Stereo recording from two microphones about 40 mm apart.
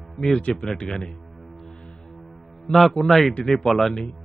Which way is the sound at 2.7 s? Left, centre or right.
Centre.